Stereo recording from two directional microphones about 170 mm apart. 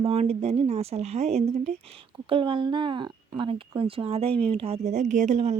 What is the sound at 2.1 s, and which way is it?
Speech, 30° right (ahead or behind).